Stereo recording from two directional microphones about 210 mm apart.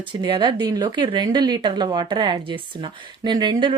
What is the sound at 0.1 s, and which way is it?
A woman's voice, 20° right (ahead or behind).